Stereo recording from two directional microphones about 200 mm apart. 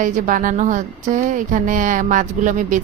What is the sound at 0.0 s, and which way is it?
Speech, 40° right (ahead or behind).